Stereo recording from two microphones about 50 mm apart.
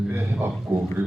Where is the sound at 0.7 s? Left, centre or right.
Right.